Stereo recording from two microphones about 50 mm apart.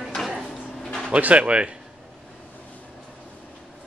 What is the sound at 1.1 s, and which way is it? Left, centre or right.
Speech, right.